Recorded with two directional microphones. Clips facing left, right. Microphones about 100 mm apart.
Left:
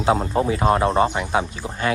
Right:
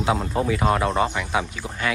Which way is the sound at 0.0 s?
35° left (ahead or behind).